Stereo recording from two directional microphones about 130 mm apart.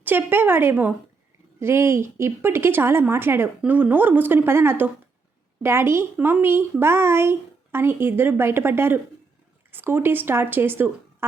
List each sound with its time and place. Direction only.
0.0 s a woman's voice: 15° right (ahead or behind)